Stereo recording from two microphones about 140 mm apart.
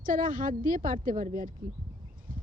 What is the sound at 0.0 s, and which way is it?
A woman's voice, 80° right.